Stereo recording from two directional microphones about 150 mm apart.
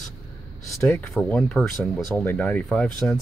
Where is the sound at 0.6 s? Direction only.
20° left (ahead or behind).